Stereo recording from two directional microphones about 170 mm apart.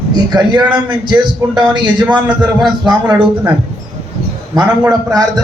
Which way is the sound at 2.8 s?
25° right (ahead or behind).